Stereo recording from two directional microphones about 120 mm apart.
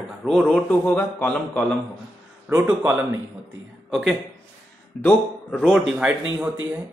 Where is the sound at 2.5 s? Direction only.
15° right (ahead or behind).